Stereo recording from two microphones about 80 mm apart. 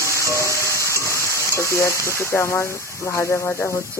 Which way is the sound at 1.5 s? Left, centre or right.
Left.